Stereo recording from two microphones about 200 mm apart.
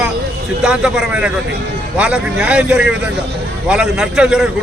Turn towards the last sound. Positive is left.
turn(degrees=-5)  # may be behind; listen again after turning